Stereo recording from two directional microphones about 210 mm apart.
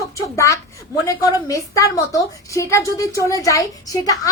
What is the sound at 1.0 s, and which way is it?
A woman's voice, 15° left (ahead or behind).